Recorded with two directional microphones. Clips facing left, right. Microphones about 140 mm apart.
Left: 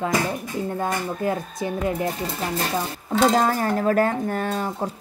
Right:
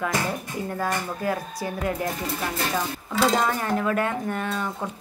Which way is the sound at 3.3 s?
40° left (ahead or behind).